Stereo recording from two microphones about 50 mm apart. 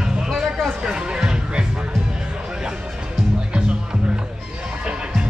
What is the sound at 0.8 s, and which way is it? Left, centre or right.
Music, centre.